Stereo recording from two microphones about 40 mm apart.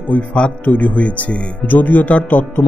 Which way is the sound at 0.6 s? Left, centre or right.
Left.